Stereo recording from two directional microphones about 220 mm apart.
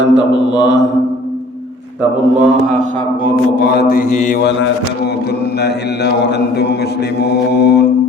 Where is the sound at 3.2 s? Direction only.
45° left (ahead or behind).